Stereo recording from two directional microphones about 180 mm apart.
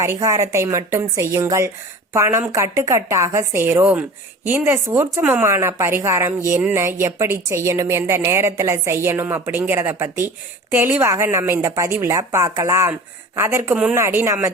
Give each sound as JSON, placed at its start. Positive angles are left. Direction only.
{"t": 0.0, "sound": "a woman's voice", "side_deg": -15}